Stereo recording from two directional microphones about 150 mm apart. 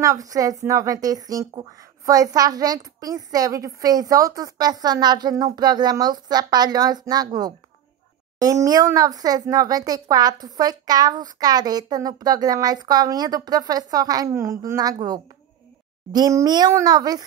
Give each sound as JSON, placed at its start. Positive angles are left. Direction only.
{"t": 0.0, "sound": "speech", "side_deg": -20}